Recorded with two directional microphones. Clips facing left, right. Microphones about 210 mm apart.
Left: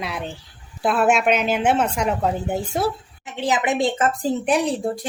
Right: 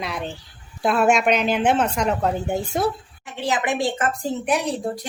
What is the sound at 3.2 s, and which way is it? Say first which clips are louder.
A woman's voice: left 2 dB; 20° left (ahead or behind).